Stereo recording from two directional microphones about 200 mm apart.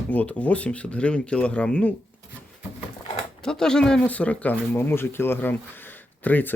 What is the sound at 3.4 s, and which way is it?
Speech, 5° left (ahead or behind).